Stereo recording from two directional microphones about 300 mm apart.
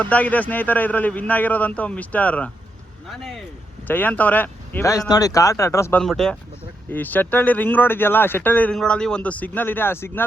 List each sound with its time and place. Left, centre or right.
0.0 s speech: centre